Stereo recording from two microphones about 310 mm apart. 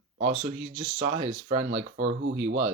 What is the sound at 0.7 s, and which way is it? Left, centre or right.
Speech, right.